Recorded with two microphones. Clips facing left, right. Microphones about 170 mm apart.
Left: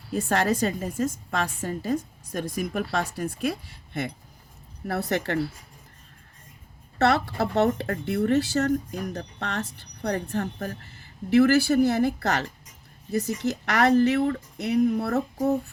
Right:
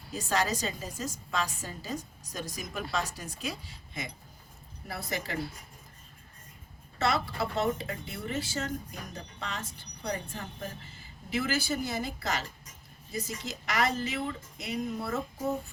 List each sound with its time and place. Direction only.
0.1 s a woman's voice: 55° left (ahead or behind)
7.0 s a woman's voice: 65° left (ahead or behind)